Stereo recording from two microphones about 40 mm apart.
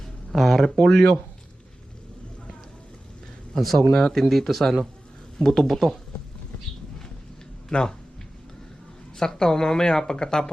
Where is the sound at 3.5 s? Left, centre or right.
Centre.